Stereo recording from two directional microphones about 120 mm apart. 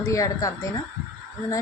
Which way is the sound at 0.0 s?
25° left (ahead or behind).